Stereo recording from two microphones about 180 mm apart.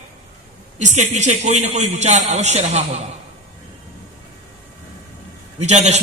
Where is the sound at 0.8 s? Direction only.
40° right (ahead or behind).